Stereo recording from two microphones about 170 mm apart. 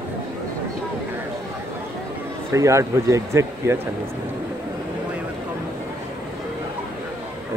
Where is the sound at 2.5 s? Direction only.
20° right (ahead or behind).